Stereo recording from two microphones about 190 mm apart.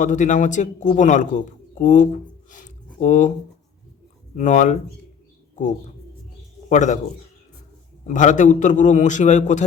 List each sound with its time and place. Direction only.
0.0 s a man's voice: 40° left (ahead or behind)
4.4 s a man's voice: 40° left (ahead or behind)
6.7 s a man's voice: 40° left (ahead or behind)
8.0 s a man's voice: 40° left (ahead or behind)